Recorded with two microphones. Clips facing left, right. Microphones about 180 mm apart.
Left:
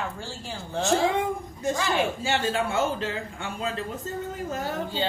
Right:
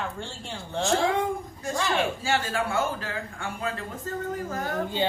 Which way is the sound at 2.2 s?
20° left (ahead or behind).